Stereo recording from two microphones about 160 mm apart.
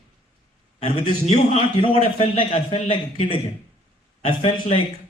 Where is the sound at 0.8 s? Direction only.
40° left (ahead or behind).